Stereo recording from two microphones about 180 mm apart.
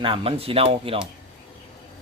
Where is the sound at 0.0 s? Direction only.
30° right (ahead or behind).